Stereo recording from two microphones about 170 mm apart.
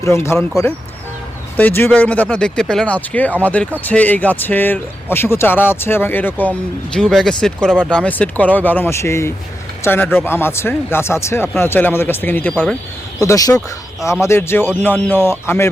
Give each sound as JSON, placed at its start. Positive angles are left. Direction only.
{"t": 0.0, "sound": "speech", "side_deg": 15}
{"t": 0.3, "sound": "speech", "side_deg": 0}